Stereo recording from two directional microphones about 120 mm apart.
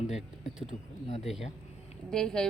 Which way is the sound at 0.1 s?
65° left (ahead or behind).